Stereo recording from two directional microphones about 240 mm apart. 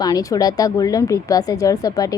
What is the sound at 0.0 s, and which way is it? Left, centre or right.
A woman's voice, centre.